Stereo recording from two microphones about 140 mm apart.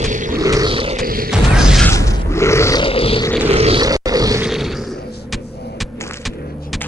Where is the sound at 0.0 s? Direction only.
65° right (ahead or behind).